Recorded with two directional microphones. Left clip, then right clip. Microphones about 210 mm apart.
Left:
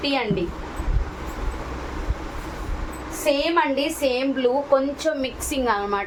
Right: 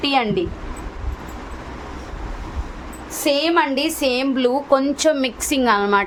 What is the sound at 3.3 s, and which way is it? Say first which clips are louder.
A woman's voice: right 3 dB; 55° right (ahead or behind).